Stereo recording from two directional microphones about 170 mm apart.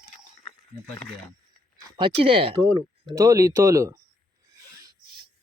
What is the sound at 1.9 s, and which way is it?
Speech, 30° right (ahead or behind).